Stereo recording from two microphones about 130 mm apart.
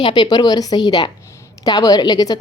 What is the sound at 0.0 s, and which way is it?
Speech, 35° left (ahead or behind).